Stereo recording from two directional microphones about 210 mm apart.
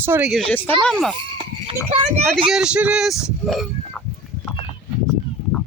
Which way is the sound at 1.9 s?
30° right (ahead or behind).